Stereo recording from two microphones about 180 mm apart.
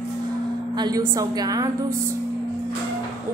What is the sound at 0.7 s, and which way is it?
A woman's voice, 20° right (ahead or behind).